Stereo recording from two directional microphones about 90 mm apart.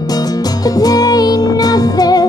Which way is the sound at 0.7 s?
45° left (ahead or behind).